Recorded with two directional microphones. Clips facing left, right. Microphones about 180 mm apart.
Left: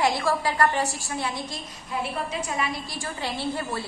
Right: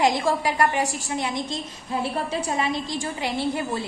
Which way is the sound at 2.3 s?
30° right (ahead or behind).